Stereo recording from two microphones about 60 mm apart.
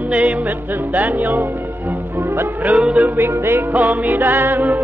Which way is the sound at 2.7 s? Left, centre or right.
Centre.